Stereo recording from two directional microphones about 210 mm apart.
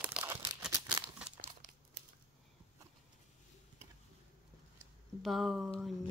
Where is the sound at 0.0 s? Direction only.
10° right (ahead or behind).